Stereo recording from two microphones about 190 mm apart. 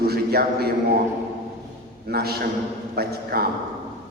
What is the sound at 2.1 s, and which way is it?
A man's voice, 55° right (ahead or behind).